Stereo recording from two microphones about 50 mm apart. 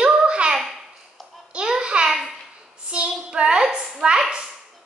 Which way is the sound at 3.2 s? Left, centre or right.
Centre.